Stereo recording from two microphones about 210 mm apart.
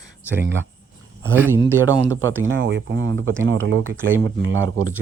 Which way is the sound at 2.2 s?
70° right (ahead or behind).